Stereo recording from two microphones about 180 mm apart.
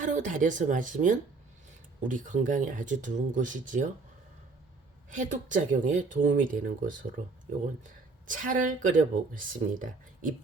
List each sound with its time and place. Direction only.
0.0 s speech: 45° right (ahead or behind)
5.1 s speech: 45° right (ahead or behind)